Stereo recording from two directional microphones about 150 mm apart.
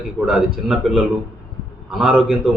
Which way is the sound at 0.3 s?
Centre (ahead or behind).